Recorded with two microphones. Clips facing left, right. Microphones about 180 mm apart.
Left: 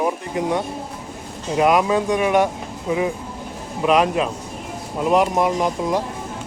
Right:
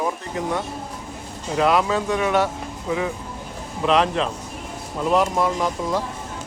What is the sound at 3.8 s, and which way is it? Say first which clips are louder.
Speech: left 2 dB; 10° left (ahead or behind).